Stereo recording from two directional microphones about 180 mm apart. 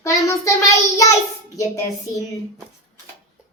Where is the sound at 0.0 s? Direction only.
15° left (ahead or behind).